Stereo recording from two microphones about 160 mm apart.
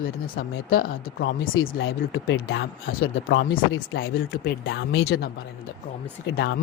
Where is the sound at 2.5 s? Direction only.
80° left.